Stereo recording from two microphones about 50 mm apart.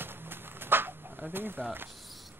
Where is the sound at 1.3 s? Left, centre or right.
Right.